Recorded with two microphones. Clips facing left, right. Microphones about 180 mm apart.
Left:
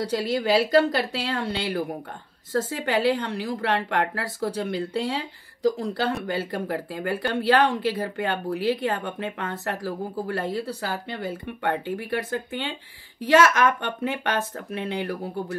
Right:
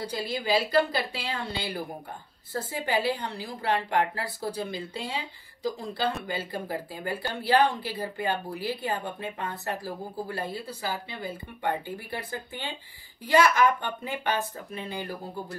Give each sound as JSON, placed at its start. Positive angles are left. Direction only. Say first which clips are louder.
{"t": 0.0, "sound": "speech", "louder": "left 7 dB", "side_deg": 80}